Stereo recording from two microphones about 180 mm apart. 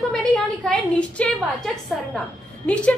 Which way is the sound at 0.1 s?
5° left (ahead or behind).